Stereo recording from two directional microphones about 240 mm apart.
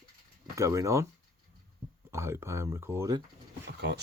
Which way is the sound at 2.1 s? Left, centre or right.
Centre.